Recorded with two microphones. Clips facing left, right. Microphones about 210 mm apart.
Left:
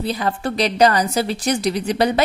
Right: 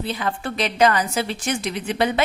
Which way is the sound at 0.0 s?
40° left (ahead or behind).